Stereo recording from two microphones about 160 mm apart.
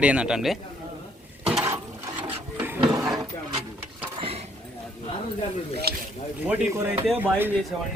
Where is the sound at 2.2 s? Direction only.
10° right (ahead or behind).